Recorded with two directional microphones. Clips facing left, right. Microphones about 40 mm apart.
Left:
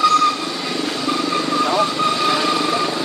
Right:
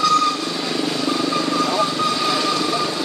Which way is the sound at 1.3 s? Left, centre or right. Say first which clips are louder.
Left 1 dB; centre.